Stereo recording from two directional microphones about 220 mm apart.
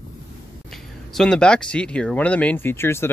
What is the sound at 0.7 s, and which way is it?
Speech, centre (ahead or behind).